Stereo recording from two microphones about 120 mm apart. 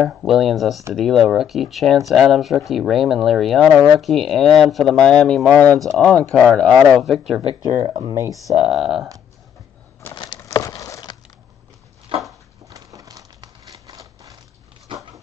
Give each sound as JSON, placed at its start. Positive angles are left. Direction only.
{"t": 0.0, "sound": "speech", "side_deg": 0}
{"t": 7.6, "sound": "speech", "side_deg": -40}
{"t": 8.1, "sound": "speech", "side_deg": -25}
{"t": 8.5, "sound": "speech", "side_deg": -5}
{"t": 10.1, "sound": "a sound", "side_deg": 40}
{"t": 12.1, "sound": "a sound", "side_deg": -45}
{"t": 12.6, "sound": "crumpling", "side_deg": -30}